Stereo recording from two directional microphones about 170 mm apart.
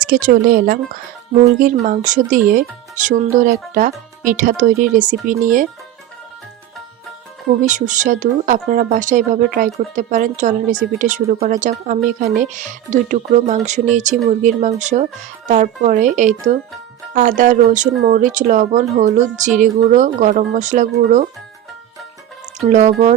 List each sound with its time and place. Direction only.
0.0 s speech: 55° right (ahead or behind)
7.7 s speech: 50° right (ahead or behind)
22.6 s speech: 45° right (ahead or behind)